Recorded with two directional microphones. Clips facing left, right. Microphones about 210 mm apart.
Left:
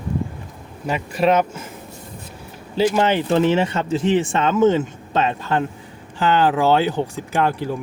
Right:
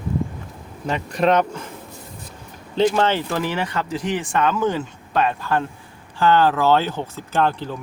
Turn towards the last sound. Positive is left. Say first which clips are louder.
# left 1 dB
turn(degrees=10)  # may be behind; listen again after turning